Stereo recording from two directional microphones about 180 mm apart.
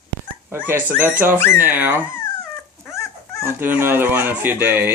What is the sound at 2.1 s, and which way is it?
Dog, 15° left (ahead or behind).